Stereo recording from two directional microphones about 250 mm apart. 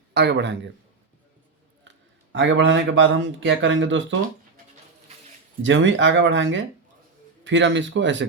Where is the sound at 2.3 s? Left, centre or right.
Right.